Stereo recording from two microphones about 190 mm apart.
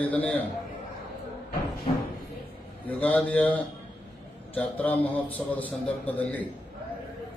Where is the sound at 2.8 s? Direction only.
10° left (ahead or behind).